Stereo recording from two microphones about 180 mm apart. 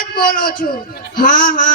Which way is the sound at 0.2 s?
50° left (ahead or behind).